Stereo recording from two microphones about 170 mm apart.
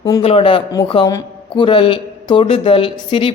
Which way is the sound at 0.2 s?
35° left (ahead or behind).